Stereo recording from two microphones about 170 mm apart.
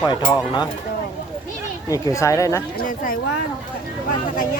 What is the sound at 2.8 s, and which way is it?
Speech, 50° left (ahead or behind).